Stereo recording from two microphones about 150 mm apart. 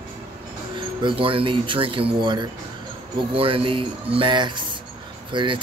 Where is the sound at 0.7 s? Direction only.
35° right (ahead or behind).